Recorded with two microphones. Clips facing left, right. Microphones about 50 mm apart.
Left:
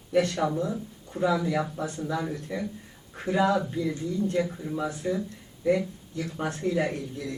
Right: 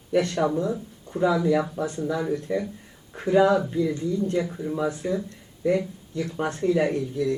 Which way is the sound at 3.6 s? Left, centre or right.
Centre.